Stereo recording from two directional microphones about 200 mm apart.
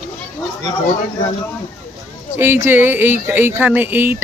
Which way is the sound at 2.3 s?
10° right (ahead or behind).